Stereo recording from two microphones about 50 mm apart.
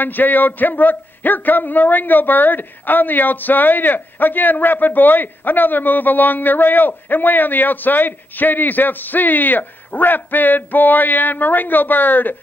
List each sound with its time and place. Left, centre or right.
0.0 s a man's voice: left